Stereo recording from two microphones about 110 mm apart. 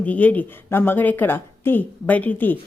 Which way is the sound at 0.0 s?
15° left (ahead or behind).